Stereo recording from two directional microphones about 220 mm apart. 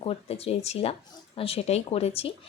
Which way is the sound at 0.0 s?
25° left (ahead or behind).